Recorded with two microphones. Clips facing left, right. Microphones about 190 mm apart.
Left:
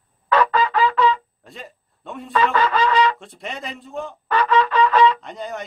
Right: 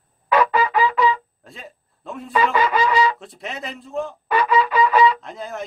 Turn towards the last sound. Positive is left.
turn(degrees=0)  # may be behind; listen again after turning